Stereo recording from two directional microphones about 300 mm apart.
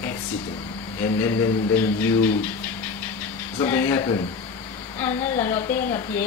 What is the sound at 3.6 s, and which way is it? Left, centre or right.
A woman's voice, centre.